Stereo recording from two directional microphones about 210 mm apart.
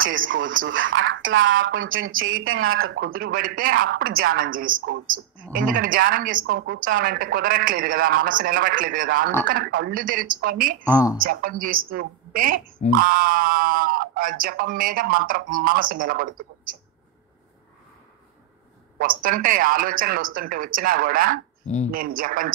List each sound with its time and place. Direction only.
0.0 s speech: 65° right (ahead or behind)
3.1 s speech: 45° right (ahead or behind)
4.1 s speech: 80° right
4.4 s a man's voice: 40° right (ahead or behind)
18.9 s a man's voice: 40° right (ahead or behind)